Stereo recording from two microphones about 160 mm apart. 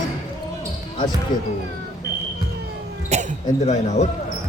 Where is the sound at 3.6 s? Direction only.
45° left (ahead or behind).